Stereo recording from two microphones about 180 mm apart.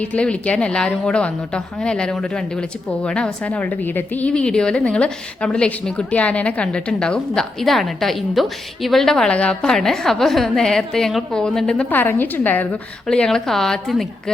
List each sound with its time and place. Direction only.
0.0 s a woman's voice: 5° left (ahead or behind)